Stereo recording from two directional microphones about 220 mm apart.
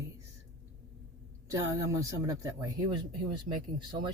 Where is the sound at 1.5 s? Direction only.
15° right (ahead or behind).